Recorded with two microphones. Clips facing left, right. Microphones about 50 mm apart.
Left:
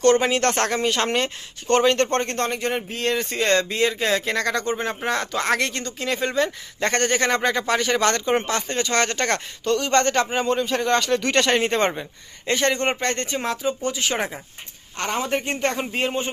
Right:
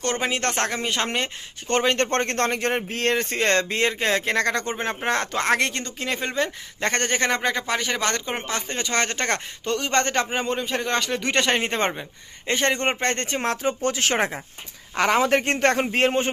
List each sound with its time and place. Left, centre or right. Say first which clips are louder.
0.0 s speech: left 7 dB; centre
1.7 s speech: left 4 dB; right
2.0 s speech: left 1 dB; right
3.2 s speech: left 3 dB; right
7.3 s speech: left 3 dB; centre
12.5 s speech: left 1 dB; right
15.1 s a man's voice: right 3 dB; right